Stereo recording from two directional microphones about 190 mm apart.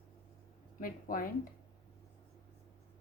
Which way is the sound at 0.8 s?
50° left (ahead or behind).